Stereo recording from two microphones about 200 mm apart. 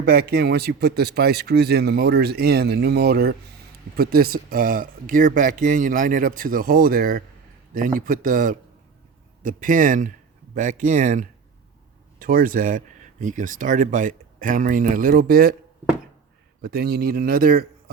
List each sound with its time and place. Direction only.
0.0 s a man's voice: 50° right (ahead or behind)
16.6 s a man's voice: 50° right (ahead or behind)